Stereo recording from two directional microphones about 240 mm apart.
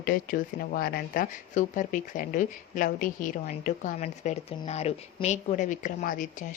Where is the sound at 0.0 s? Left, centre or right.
Left.